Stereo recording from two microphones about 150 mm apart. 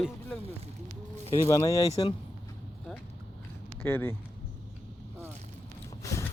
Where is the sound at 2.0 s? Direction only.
30° left (ahead or behind).